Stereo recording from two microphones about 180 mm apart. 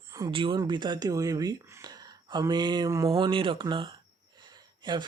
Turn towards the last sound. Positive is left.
turn(degrees=-25)  # may be behind; listen again after turning